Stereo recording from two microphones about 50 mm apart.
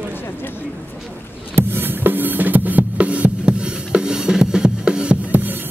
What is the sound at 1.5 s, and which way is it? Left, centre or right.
Drum, right.